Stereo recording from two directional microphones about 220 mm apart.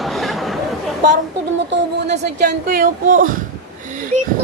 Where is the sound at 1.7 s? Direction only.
50° right (ahead or behind).